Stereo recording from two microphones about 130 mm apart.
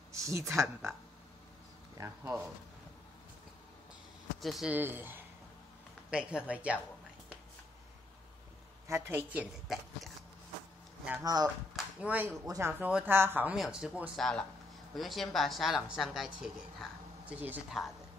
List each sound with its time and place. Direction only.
0.1 s speech: 25° right (ahead or behind)
2.0 s speech: 20° right (ahead or behind)
4.4 s speech: centre (ahead or behind)
4.7 s speech: 15° right (ahead or behind)
8.8 s a woman's voice: 20° right (ahead or behind)
9.3 s speech: 10° right (ahead or behind)
11.1 s speech: 30° right (ahead or behind)
11.7 s a sound: 10° right (ahead or behind)
12.4 s speech: 25° right (ahead or behind)
12.8 s speech: 15° right (ahead or behind)
14.1 s speech: 5° left (ahead or behind)
17.6 s speech: centre (ahead or behind)